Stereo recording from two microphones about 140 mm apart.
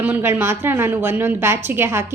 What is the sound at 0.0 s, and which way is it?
A woman's voice, 15° right (ahead or behind).